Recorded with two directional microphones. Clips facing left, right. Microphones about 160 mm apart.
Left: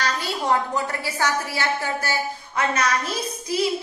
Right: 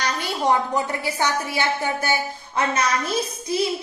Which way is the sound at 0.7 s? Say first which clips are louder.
Right 2 dB; 20° right (ahead or behind).